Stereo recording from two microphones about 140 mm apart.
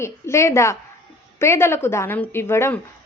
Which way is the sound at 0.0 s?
20° left (ahead or behind).